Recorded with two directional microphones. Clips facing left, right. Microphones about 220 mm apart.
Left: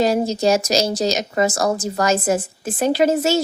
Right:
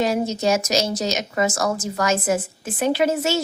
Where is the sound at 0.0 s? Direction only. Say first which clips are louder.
Left 3 dB; 35° left (ahead or behind).